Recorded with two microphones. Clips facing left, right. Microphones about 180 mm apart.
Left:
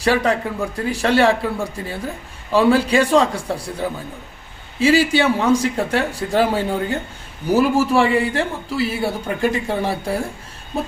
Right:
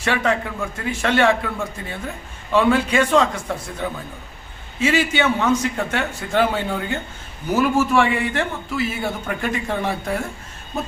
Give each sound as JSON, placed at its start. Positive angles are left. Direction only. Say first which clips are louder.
{"t": 0.0, "sound": "a man's voice", "louder": "left 3 dB", "side_deg": 35}
{"t": 9.0, "sound": "speech", "louder": "left 3 dB", "side_deg": 10}
{"t": 9.4, "sound": "a man's voice", "louder": "left 4 dB", "side_deg": 30}